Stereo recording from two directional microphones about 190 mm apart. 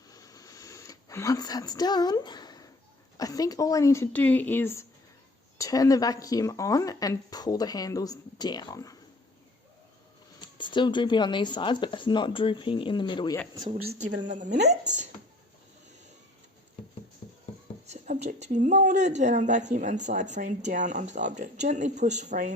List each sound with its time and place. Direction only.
0.1 s a sound: 20° left (ahead or behind)
3.2 s a woman's voice: 20° left (ahead or behind)
10.6 s speech: 25° left (ahead or behind)
13.7 s speech: 40° right (ahead or behind)
17.8 s speech: 40° right (ahead or behind)